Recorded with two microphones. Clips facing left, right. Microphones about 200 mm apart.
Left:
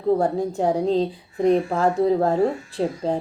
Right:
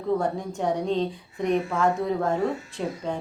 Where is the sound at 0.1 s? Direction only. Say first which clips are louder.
Left 6 dB; 35° left (ahead or behind).